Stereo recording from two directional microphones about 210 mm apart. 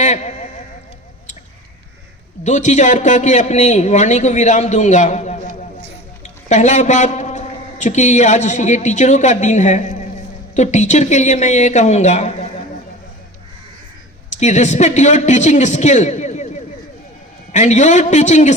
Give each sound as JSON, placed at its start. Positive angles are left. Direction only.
{"t": 0.0, "sound": "a man's voice", "side_deg": 35}
{"t": 2.4, "sound": "a man's voice", "side_deg": 35}
{"t": 14.3, "sound": "a man's voice", "side_deg": 35}
{"t": 17.5, "sound": "a man's voice", "side_deg": 35}